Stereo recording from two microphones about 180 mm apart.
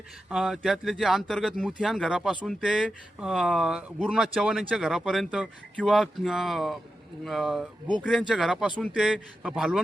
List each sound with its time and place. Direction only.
0.3 s speech: centre (ahead or behind)